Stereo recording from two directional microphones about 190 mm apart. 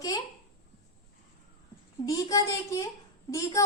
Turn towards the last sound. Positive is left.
turn(degrees=15)  # may be behind; listen again after turning